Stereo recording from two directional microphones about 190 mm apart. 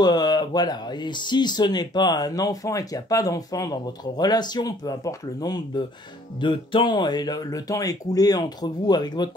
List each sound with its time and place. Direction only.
0.0 s speech: 20° left (ahead or behind)